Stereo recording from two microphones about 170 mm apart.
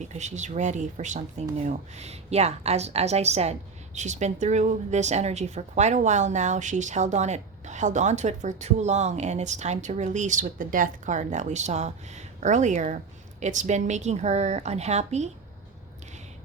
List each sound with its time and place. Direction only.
0.0 s speech: 45° right (ahead or behind)